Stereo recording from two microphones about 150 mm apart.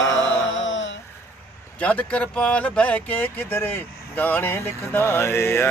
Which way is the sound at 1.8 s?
10° left (ahead or behind).